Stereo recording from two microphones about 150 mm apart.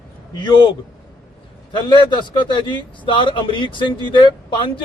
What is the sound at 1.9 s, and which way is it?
A man's voice, 30° left (ahead or behind).